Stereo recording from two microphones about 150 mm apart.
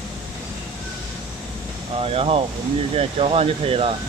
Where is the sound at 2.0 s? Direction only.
40° right (ahead or behind).